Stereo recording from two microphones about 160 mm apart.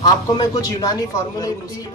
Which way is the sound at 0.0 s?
25° left (ahead or behind).